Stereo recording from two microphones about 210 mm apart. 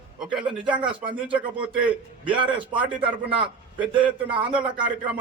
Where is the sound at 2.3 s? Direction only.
25° right (ahead or behind).